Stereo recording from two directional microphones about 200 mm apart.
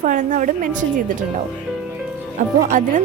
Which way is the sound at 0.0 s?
40° right (ahead or behind).